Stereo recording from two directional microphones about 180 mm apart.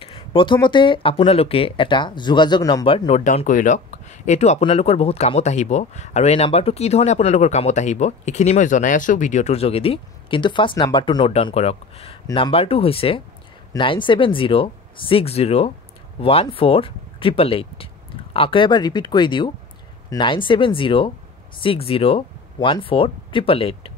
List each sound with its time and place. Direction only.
0.0 s speech: 30° left (ahead or behind)